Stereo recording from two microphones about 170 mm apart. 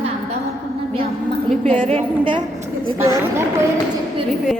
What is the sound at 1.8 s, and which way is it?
Speech, 30° right (ahead or behind).